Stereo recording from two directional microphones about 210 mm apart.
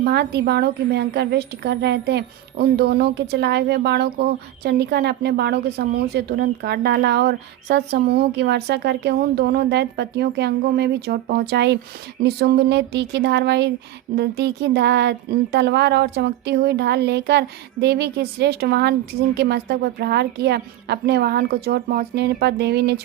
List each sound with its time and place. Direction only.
0.0 s a woman's voice: 50° right (ahead or behind)